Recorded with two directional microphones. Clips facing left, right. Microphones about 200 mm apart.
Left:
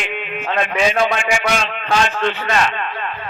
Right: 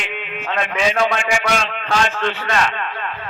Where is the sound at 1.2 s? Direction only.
15° left (ahead or behind).